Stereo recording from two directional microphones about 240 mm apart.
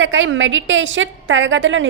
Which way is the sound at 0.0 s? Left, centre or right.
Right.